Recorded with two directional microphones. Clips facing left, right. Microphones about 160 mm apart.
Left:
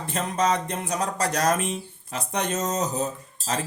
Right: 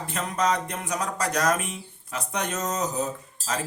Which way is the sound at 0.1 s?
30° left (ahead or behind).